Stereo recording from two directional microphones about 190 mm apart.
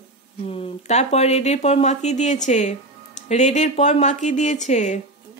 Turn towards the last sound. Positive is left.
turn(degrees=35)  # may be behind; listen again after turning